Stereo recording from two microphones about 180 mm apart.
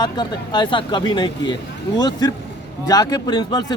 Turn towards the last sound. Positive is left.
turn(degrees=25)  # may be behind; listen again after turning